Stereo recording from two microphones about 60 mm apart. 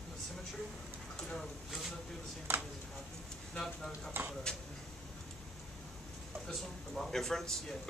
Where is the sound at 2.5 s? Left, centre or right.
Right.